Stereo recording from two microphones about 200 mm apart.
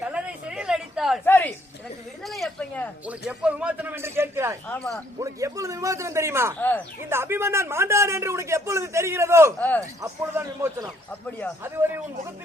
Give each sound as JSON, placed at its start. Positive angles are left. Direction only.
{"t": 0.0, "sound": "a sound", "side_deg": -5}
{"t": 1.2, "sound": "a sound", "side_deg": 10}
{"t": 3.1, "sound": "a man's voice", "side_deg": -5}
{"t": 4.6, "sound": "speech", "side_deg": 5}
{"t": 5.2, "sound": "a man's voice", "side_deg": -15}
{"t": 6.6, "sound": "speech", "side_deg": 10}
{"t": 7.1, "sound": "a man's voice", "side_deg": -10}
{"t": 9.6, "sound": "speech", "side_deg": 10}
{"t": 9.8, "sound": "a man's voice", "side_deg": -15}
{"t": 11.1, "sound": "speech", "side_deg": 5}